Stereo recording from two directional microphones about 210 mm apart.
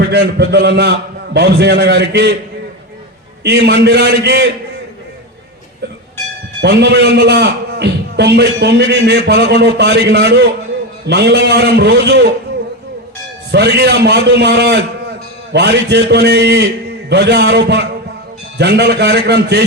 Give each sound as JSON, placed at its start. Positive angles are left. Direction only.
{"t": 0.0, "sound": "a man's voice", "side_deg": -50}
{"t": 3.4, "sound": "a man's voice", "side_deg": -55}
{"t": 6.6, "sound": "a man's voice", "side_deg": -55}
{"t": 13.5, "sound": "a man's voice", "side_deg": -55}